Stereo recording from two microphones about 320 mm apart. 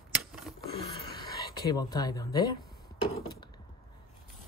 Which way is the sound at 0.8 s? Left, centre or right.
Centre.